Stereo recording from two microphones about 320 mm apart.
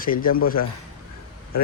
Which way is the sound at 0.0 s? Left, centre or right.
Left.